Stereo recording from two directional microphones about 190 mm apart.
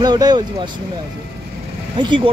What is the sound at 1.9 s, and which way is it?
Speech, 25° right (ahead or behind).